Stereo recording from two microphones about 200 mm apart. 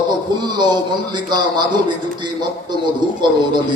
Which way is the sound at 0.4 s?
20° right (ahead or behind).